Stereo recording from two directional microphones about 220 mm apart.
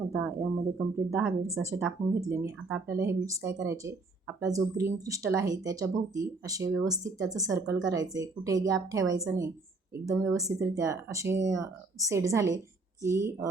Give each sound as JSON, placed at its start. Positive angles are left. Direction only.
{"t": 0.1, "sound": "speech", "side_deg": -10}